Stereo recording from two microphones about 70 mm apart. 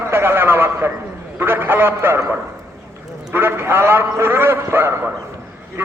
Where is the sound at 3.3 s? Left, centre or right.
Right.